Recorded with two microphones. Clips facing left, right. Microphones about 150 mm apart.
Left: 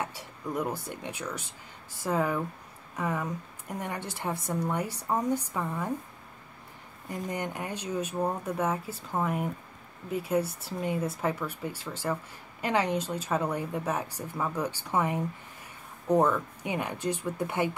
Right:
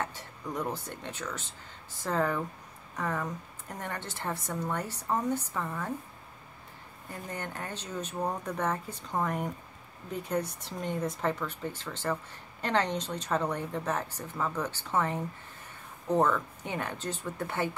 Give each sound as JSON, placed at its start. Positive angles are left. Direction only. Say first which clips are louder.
{"t": 0.0, "sound": "speech", "louder": "left 1 dB", "side_deg": 10}
{"t": 7.1, "sound": "speech", "louder": "left 5 dB", "side_deg": 15}